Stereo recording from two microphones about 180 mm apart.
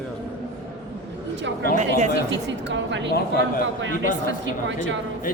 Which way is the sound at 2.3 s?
85° right.